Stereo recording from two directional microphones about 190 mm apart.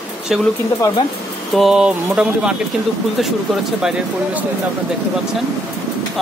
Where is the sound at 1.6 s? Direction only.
5° right (ahead or behind).